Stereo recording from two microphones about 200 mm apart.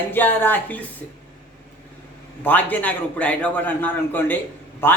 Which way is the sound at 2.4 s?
10° left (ahead or behind).